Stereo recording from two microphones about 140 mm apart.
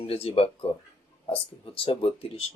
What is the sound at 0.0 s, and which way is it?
Speech, 45° left (ahead or behind).